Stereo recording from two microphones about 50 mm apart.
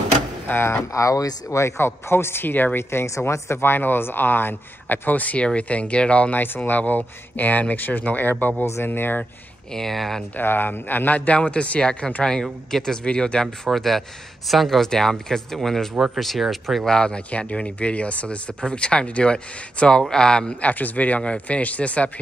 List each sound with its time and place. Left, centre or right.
0.5 s speech: left
0.9 s speech: left
2.9 s speech: left
3.6 s speech: left
6.3 s speech: left
9.8 s speech: centre
10.3 s speech: left
11.3 s speech: left
12.4 s speech: centre
13.7 s speech: centre
16.9 s speech: centre
20.7 s speech: left